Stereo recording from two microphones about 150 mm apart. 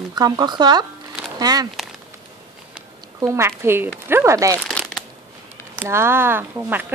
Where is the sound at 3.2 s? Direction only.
15° right (ahead or behind).